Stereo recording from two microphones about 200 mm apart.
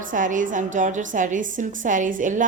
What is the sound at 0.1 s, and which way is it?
A woman's voice, 40° right (ahead or behind).